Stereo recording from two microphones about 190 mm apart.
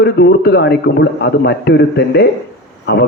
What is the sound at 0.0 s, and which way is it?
A man's voice, 60° left (ahead or behind).